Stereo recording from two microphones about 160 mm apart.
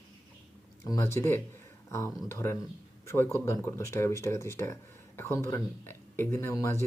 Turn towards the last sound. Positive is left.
turn(degrees=15)  # may be behind; listen again after turning